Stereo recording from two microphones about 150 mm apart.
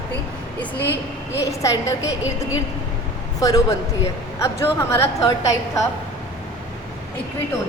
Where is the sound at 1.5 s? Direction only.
20° left (ahead or behind).